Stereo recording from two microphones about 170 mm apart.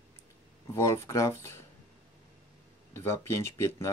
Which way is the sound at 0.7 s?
15° left (ahead or behind).